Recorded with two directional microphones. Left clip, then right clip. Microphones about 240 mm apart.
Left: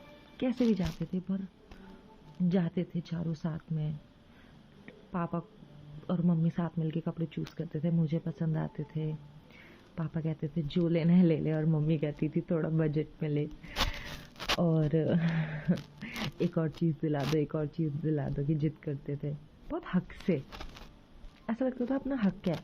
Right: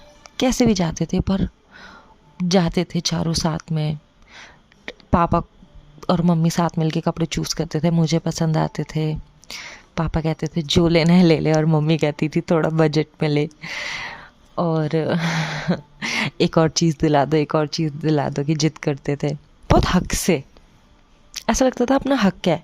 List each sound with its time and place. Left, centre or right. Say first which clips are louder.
0.3 s speech: right 13 dB; right
2.5 s speech: right 15 dB; right
4.9 s a sound: right 19 dB; right
6.1 s speech: right 14 dB; right
14.6 s speech: right 13 dB; right